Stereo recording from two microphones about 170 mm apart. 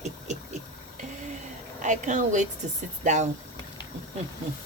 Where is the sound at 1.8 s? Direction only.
45° right (ahead or behind).